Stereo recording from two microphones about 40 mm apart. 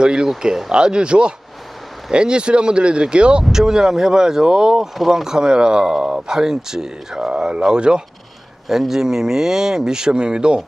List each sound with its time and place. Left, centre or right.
0.0 s speech: right
0.4 s speech: centre
0.7 s speech: right
3.5 s speech: centre
7.3 s speech: right
8.6 s speech: centre; by 10.6 s right